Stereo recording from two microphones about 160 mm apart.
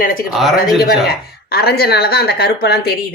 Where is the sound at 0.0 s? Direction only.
60° left (ahead or behind).